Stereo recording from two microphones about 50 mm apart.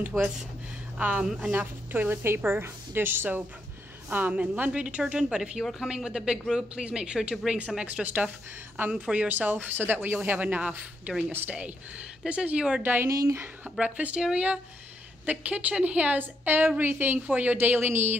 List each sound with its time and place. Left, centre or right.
0.1 s speech: centre
0.9 s speech: right
1.9 s a woman's voice: right
5.1 s speech: centre
7.8 s speech: right
8.8 s a woman's voice: right
9.1 s speech: right
9.7 s speech: right
12.3 s speech: right
12.8 s a woman's voice: right
13.7 s speech: right